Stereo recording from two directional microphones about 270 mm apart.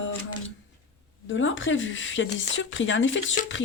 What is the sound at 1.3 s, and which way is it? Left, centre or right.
Speech, left.